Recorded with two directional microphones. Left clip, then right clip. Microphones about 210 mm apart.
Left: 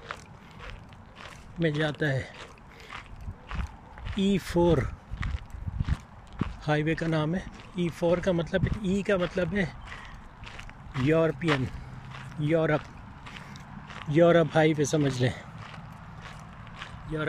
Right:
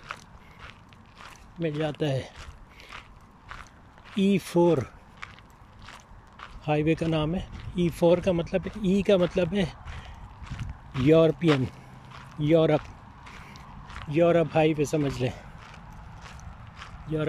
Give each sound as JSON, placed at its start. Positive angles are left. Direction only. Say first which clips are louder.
{"t": 0.1, "sound": "walk", "louder": "right 2 dB", "side_deg": 0}
{"t": 1.6, "sound": "speech", "louder": "left 1 dB", "side_deg": -5}
{"t": 4.2, "sound": "speech", "louder": "right 2 dB", "side_deg": -15}
{"t": 6.3, "sound": "a sound", "louder": "right 1 dB", "side_deg": -5}
{"t": 7.9, "sound": "speech", "louder": "right 4 dB", "side_deg": -15}
{"t": 10.4, "sound": "a sound", "louder": "left 1 dB", "side_deg": 0}
{"t": 11.1, "sound": "speech", "louder": "right 5 dB", "side_deg": -15}
{"t": 13.9, "sound": "speech", "louder": "left 1 dB", "side_deg": -5}
{"t": 17.1, "sound": "speech", "louder": "right 3 dB", "side_deg": -15}